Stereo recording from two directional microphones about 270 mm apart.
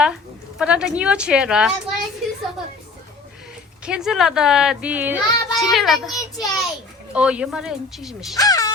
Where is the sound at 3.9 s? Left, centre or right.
Centre.